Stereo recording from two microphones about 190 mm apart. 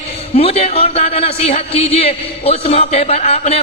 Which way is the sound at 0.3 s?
30° left (ahead or behind).